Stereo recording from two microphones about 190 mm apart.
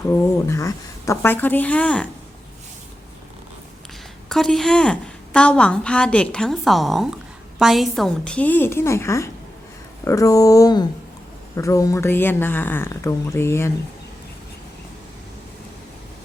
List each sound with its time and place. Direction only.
0.1 s speech: 15° left (ahead or behind)
4.3 s a woman's voice: centre (ahead or behind)